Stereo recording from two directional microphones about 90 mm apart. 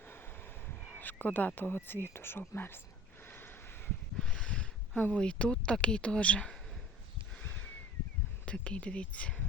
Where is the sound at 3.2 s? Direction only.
25° left (ahead or behind).